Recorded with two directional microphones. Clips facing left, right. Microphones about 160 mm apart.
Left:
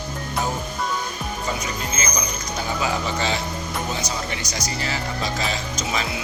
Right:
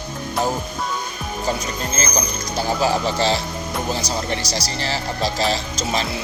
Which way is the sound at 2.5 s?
35° right (ahead or behind).